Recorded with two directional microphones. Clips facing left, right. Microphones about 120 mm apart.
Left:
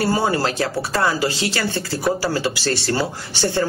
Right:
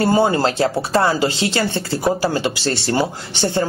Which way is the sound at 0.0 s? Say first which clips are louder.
Right 4 dB; 25° right (ahead or behind).